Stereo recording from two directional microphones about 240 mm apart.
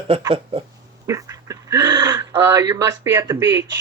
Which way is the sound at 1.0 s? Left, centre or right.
Centre.